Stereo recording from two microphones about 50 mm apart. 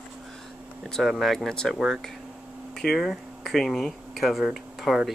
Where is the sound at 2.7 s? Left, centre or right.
Centre.